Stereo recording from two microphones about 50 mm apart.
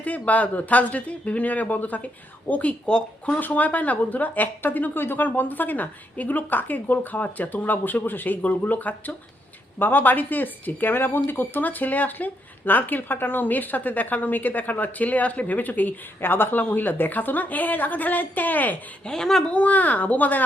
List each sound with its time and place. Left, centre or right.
0.0 s speech: left
19.0 s speech: centre
19.5 s speech: left